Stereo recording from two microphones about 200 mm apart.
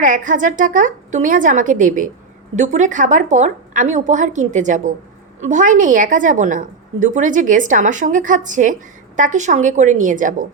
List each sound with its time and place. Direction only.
0.0 s a woman's voice: 40° right (ahead or behind)